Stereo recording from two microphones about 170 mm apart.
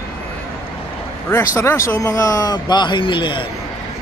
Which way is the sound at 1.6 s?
15° left (ahead or behind).